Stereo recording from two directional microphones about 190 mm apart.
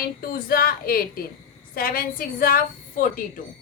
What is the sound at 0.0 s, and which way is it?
A woman's voice, 50° left (ahead or behind).